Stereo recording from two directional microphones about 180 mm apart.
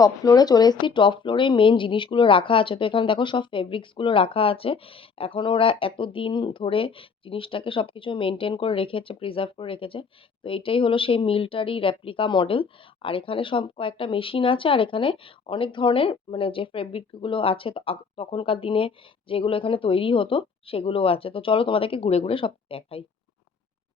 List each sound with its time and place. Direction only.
0.0 s speech: 20° left (ahead or behind)